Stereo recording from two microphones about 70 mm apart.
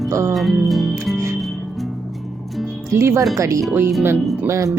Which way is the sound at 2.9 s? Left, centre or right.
Right.